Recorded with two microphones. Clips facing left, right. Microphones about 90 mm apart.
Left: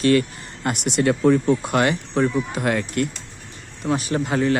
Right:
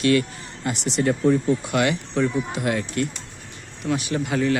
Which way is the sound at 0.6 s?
60° left (ahead or behind).